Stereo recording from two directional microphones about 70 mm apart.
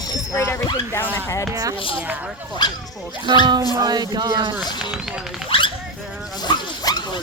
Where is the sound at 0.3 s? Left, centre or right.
Left.